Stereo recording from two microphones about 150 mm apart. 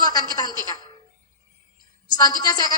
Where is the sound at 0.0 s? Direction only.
25° left (ahead or behind).